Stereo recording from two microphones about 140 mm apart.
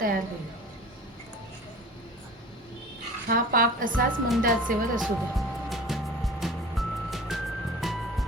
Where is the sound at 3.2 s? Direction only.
90° right.